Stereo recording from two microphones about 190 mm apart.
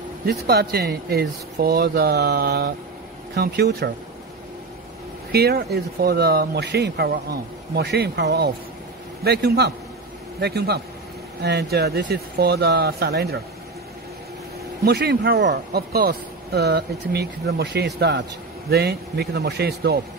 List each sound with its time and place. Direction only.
0.3 s speech: 55° right (ahead or behind)
5.3 s speech: 55° right (ahead or behind)
14.9 s speech: 60° right (ahead or behind)